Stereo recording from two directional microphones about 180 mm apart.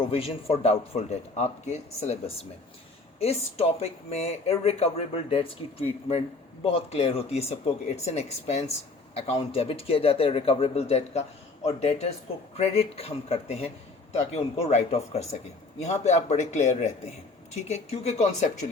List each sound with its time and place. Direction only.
0.1 s speech: 35° left (ahead or behind)